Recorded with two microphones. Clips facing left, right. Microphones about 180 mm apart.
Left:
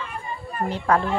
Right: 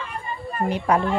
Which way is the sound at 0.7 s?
15° right (ahead or behind).